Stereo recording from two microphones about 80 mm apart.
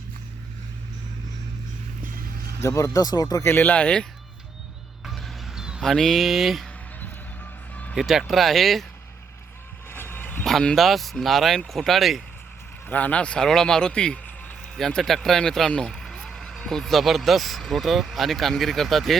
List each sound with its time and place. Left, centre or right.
2.6 s speech: left
3.4 s speech: left
5.0 s music: centre
5.8 s speech: centre
7.7 s vehicle: centre
7.9 s speech: centre
9.9 s vehicle: left
10.4 s speech: centre
12.9 s speech: centre